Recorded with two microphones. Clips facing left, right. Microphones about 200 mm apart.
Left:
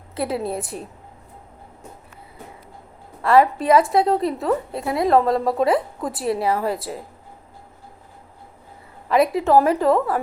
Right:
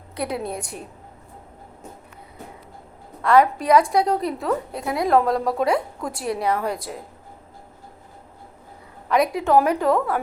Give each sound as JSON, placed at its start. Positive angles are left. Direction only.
{"t": 0.2, "sound": "a woman's voice", "side_deg": 0}
{"t": 3.2, "sound": "a woman's voice", "side_deg": 5}
{"t": 9.3, "sound": "a woman's voice", "side_deg": 0}